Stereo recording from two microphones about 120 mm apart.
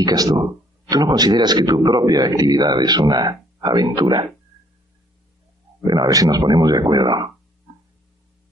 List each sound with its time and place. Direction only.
0.0 s speech: 30° right (ahead or behind)
5.9 s speech: 35° right (ahead or behind)